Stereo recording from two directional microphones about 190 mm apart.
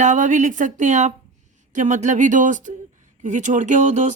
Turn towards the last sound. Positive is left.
turn(degrees=-40)  # may be behind; listen again after turning